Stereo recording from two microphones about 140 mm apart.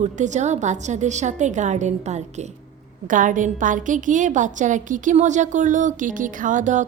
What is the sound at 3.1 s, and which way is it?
A woman's voice, 70° right (ahead or behind).